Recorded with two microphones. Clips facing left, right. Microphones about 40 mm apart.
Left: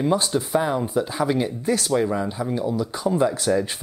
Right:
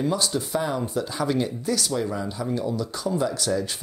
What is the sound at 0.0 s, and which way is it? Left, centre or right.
Speech, left.